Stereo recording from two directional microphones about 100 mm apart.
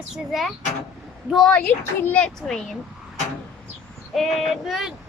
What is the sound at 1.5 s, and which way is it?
Speech, 15° left (ahead or behind).